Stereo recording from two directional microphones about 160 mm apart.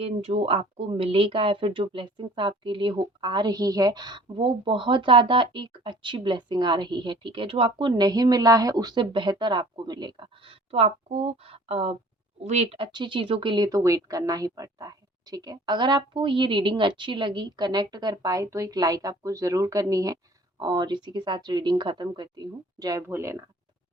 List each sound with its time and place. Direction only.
0.0 s speech: 40° right (ahead or behind); by 23.4 s 15° right (ahead or behind)